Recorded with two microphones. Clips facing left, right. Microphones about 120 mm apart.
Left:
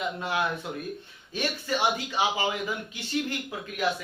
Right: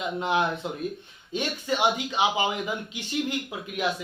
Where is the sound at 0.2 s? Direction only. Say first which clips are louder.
Right 4 dB; 20° right (ahead or behind).